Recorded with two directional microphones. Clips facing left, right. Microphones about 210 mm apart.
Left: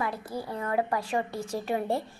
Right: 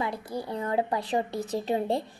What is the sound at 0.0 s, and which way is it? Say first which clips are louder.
A woman's voice: right 1 dB; 15° right (ahead or behind).